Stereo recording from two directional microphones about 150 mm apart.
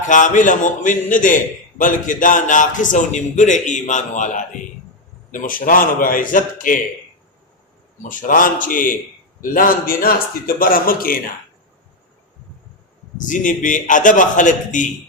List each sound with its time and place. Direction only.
0.1 s a man's voice: 60° left (ahead or behind)
8.0 s a man's voice: 65° left (ahead or behind)
13.2 s a man's voice: 60° left (ahead or behind)